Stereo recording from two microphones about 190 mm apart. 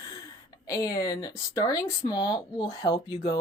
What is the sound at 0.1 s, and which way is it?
Speech, 20° left (ahead or behind).